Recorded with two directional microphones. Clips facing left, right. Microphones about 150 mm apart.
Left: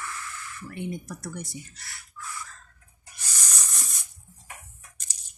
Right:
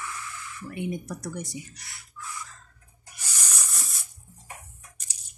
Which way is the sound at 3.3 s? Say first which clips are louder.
Even; 10° right (ahead or behind).